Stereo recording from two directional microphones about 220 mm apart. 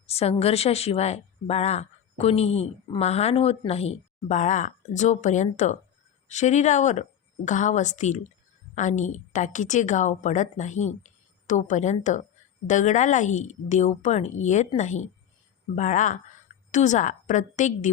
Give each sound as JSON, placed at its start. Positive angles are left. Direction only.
{"t": 0.1, "sound": "a woman's voice", "side_deg": 25}